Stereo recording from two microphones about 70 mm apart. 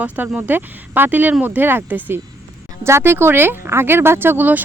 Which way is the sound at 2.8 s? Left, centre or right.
Right.